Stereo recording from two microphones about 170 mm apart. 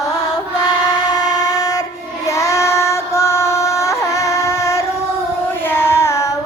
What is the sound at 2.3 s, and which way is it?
Female singing, 20° left (ahead or behind).